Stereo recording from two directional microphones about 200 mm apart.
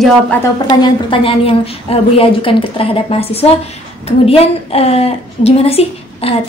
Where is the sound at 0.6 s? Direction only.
25° left (ahead or behind).